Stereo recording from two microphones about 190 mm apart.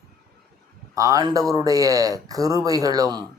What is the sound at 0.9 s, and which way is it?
Speech, 20° right (ahead or behind).